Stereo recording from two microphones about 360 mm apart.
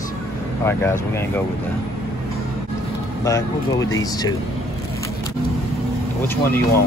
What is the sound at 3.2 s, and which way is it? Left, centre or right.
Speech, centre.